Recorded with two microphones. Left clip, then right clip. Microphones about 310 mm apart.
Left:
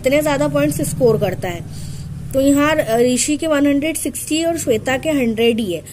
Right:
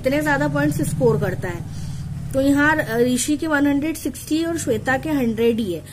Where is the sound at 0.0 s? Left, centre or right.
Centre.